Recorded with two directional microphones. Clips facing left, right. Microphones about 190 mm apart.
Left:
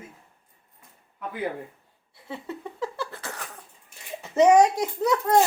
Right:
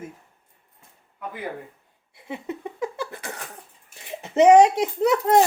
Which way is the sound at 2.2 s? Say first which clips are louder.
Right 3 dB; 20° right (ahead or behind).